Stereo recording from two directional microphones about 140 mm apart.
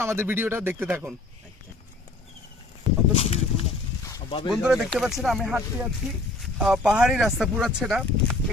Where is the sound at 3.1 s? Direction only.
50° left (ahead or behind).